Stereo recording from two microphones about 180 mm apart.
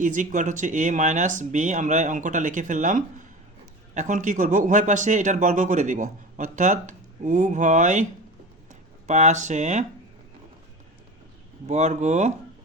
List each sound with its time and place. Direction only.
0.0 s speech: 45° right (ahead or behind)
9.0 s speech: 40° right (ahead or behind)
11.6 s speech: 40° right (ahead or behind)